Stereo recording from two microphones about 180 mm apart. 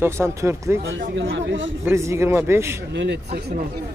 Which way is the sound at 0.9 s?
90° right.